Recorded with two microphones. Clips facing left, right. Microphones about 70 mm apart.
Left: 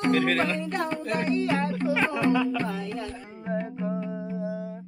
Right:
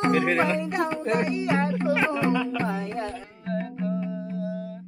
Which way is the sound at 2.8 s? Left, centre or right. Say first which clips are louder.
Right 3 dB; right.